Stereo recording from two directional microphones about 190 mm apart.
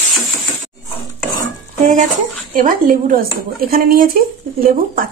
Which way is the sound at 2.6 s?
45° right (ahead or behind).